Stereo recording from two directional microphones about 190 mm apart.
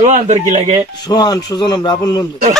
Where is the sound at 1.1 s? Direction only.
20° left (ahead or behind).